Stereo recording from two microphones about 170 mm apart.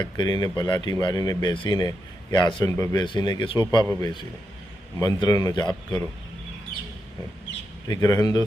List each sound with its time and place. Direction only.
0.0 s speech: 25° left (ahead or behind)
7.9 s speech: 20° left (ahead or behind)